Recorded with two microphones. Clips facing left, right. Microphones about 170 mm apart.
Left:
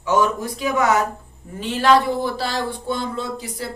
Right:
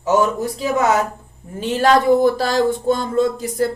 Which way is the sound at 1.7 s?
45° right (ahead or behind).